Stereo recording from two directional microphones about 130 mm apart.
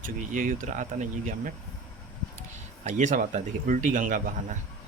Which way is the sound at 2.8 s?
70° right (ahead or behind).